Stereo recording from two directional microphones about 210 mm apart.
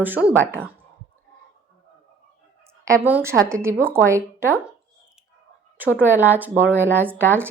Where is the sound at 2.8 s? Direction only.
10° right (ahead or behind).